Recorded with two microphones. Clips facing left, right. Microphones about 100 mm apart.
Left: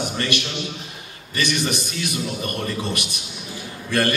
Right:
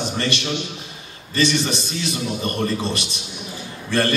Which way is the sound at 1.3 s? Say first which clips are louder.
Right 3 dB; 25° right (ahead or behind).